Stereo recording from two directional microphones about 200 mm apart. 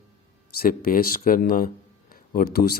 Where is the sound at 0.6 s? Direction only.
45° left (ahead or behind).